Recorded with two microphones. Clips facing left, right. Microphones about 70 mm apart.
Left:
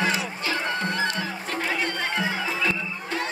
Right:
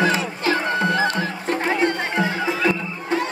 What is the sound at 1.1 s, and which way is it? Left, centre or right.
Music, right.